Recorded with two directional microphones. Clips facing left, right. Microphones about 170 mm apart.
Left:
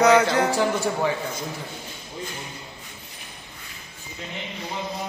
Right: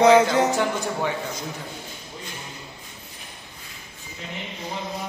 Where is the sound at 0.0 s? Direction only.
25° right (ahead or behind).